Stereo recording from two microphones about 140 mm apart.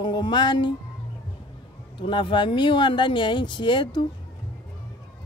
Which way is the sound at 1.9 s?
35° left (ahead or behind).